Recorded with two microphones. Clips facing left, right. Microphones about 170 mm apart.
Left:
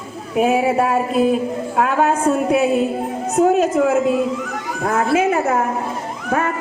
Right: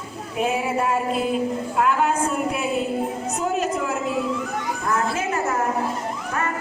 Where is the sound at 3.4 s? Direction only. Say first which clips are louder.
Left 11 dB; 55° left (ahead or behind).